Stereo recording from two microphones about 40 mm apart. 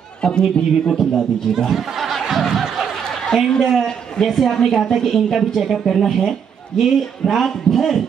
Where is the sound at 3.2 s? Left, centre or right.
Centre.